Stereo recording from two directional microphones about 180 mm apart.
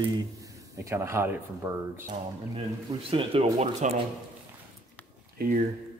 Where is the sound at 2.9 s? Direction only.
30° right (ahead or behind).